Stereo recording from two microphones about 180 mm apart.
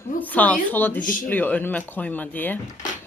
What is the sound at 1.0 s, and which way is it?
Speech, 45° left (ahead or behind).